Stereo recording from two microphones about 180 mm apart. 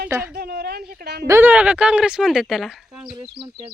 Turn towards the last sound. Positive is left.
turn(degrees=-5)  # may be behind; listen again after turning